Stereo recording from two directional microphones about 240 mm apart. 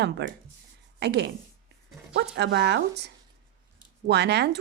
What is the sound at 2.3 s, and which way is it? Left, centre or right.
A woman's voice, right.